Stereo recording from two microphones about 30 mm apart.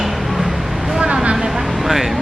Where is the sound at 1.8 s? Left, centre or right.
Centre.